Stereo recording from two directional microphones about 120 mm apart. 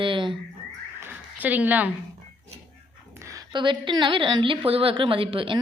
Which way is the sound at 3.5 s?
40° right (ahead or behind).